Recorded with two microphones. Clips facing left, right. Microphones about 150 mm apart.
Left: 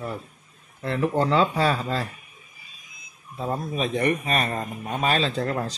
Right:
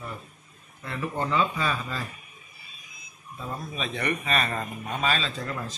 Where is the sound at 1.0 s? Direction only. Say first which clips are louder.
Left 5 dB; 90° left.